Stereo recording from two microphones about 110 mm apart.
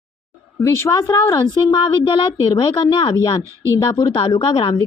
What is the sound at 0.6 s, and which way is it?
Speech, 25° left (ahead or behind).